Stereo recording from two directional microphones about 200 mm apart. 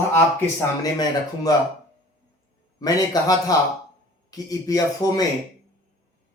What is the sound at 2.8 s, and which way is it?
A man's voice, 20° left (ahead or behind).